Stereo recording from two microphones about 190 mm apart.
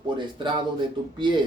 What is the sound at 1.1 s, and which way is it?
Speech, 25° right (ahead or behind).